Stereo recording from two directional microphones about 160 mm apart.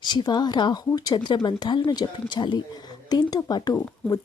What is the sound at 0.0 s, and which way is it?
Speech, 25° left (ahead or behind).